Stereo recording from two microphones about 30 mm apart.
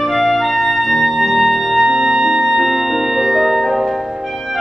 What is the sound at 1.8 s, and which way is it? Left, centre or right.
Music, centre.